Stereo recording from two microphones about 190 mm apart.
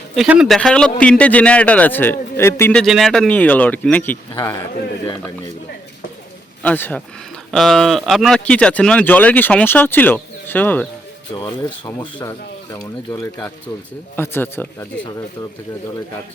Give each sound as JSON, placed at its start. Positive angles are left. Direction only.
{"t": 0.2, "sound": "speech", "side_deg": 0}
{"t": 2.8, "sound": "speech", "side_deg": 0}
{"t": 6.6, "sound": "speech", "side_deg": 10}
{"t": 11.3, "sound": "speech", "side_deg": 20}